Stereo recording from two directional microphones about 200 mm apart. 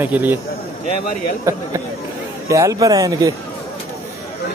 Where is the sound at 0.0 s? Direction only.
10° right (ahead or behind).